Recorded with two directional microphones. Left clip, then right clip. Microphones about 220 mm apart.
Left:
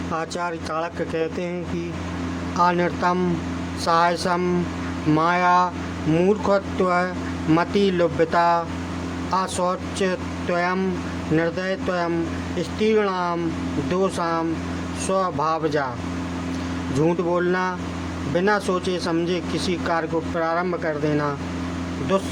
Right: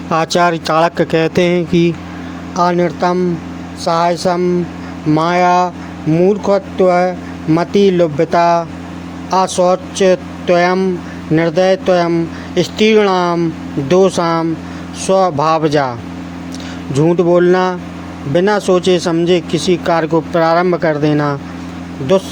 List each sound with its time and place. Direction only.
0.1 s speech: 40° right (ahead or behind)
2.6 s speech: 25° right (ahead or behind)
16.9 s speech: 25° right (ahead or behind)